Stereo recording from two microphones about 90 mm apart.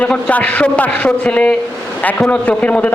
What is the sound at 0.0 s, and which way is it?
A woman's voice, 15° left (ahead or behind).